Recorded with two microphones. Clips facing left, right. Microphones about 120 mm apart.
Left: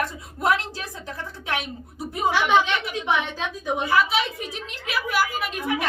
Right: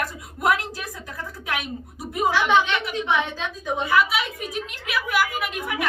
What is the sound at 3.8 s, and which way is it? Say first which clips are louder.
A woman's voice: even; 30° left (ahead or behind).